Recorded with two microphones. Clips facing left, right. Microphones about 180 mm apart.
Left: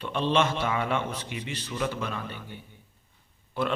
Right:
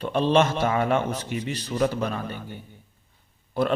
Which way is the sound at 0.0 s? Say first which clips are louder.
Right 5 dB; 40° right (ahead or behind).